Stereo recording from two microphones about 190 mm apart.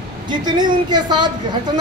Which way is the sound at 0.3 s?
25° right (ahead or behind).